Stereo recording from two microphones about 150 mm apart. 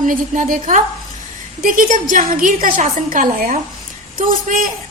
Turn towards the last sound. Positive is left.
turn(degrees=-65)  # may be behind; listen again after turning